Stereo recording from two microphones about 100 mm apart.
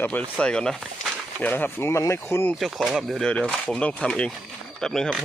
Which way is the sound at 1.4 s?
20° left (ahead or behind).